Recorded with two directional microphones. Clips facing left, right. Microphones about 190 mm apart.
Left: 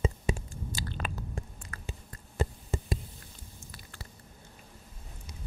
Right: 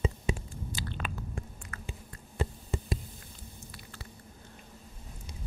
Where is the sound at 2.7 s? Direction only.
45° left (ahead or behind).